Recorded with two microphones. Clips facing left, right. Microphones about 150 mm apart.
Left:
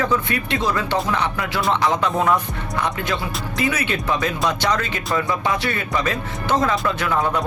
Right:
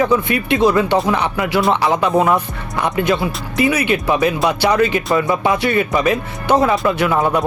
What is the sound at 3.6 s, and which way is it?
Speech, 10° right (ahead or behind).